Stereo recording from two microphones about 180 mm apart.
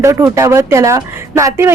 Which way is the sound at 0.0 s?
15° right (ahead or behind).